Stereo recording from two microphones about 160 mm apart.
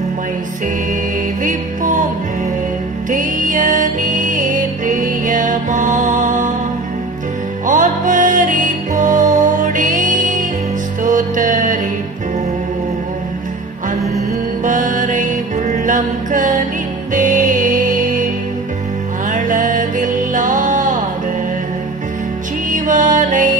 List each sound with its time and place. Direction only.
1.4 s music: 55° right (ahead or behind)
3.1 s music: 55° right (ahead or behind)
7.6 s music: 55° right (ahead or behind)
14.6 s music: 55° right (ahead or behind)
19.3 s music: 55° right (ahead or behind)
22.7 s music: 55° right (ahead or behind)